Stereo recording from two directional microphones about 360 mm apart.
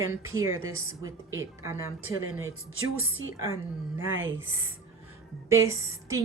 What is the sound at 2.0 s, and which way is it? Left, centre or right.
Speech, right.